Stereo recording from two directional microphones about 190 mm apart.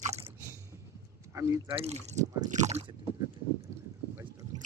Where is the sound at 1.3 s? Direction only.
15° right (ahead or behind).